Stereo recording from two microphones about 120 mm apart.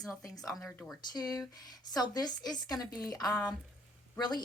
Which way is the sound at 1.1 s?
35° left (ahead or behind).